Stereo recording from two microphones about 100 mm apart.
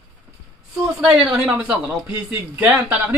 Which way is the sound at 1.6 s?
15° right (ahead or behind).